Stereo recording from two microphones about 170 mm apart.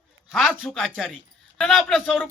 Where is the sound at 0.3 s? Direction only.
5° right (ahead or behind).